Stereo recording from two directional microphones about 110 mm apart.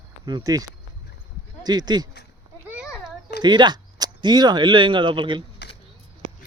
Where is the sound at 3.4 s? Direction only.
45° right (ahead or behind).